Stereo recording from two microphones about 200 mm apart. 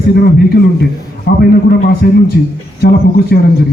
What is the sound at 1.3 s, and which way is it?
A man's voice, 55° left (ahead or behind).